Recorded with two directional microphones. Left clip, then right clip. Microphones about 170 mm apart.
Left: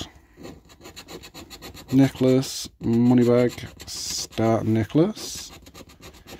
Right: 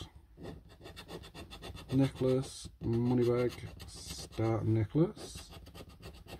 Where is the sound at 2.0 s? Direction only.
40° left (ahead or behind).